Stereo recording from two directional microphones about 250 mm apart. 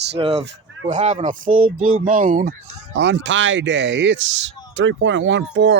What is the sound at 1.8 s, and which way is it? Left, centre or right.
Speech, right.